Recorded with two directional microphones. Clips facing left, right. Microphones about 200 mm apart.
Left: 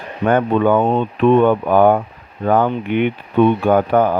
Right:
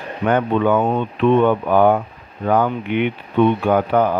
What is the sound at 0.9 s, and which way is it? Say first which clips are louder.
Speech: left 2 dB; 40° left (ahead or behind).